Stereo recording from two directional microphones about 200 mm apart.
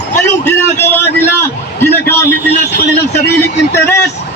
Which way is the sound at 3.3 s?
55° left (ahead or behind).